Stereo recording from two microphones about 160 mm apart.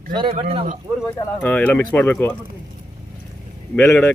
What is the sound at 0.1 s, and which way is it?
Speech, 30° right (ahead or behind).